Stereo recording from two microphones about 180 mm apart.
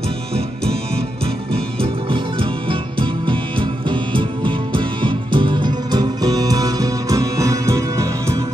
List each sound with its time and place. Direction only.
0.9 s music: 30° right (ahead or behind); by 8.4 s 15° right (ahead or behind)